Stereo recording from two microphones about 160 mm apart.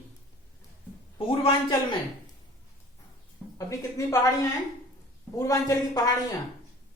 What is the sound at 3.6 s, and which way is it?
Speech, 20° left (ahead or behind).